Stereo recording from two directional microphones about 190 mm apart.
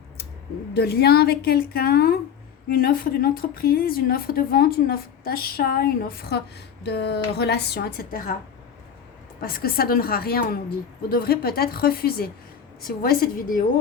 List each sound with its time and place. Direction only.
0.7 s a woman's voice: 55° left (ahead or behind)
9.4 s a woman's voice: 50° left (ahead or behind)